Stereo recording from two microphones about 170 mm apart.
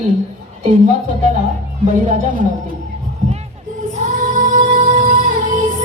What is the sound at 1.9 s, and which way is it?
Speech, 50° right (ahead or behind).